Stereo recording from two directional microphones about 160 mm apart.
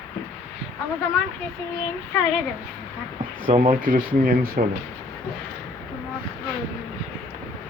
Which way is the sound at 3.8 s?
60° right (ahead or behind).